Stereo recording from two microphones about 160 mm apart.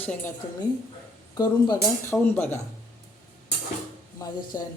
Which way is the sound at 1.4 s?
25° left (ahead or behind).